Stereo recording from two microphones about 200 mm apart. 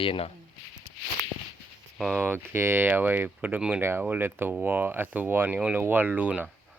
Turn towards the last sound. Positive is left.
turn(degrees=-5)  # may be behind; listen again after turning